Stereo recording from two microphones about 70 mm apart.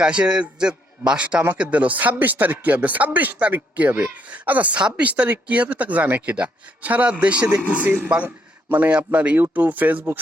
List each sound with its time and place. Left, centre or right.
0.0 s a man's voice: centre
7.8 s a man's voice: right